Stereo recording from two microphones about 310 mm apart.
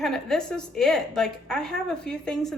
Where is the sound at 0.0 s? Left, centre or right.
Centre.